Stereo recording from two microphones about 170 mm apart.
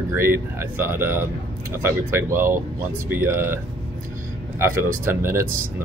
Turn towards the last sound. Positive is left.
turn(degrees=-15)  # may be behind; listen again after turning